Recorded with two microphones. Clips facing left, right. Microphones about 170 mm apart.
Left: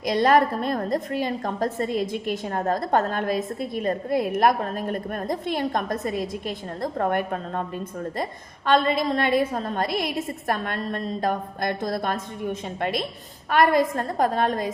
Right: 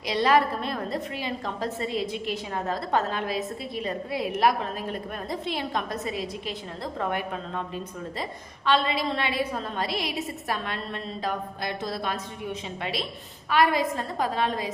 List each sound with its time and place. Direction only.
0.0 s a woman's voice: 45° left (ahead or behind)